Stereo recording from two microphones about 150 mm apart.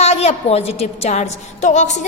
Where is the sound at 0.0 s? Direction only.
45° left (ahead or behind).